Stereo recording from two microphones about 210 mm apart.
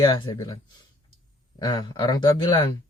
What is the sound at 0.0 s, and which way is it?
Speech, 20° left (ahead or behind).